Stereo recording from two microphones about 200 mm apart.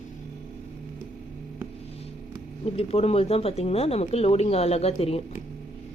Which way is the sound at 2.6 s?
30° left (ahead or behind).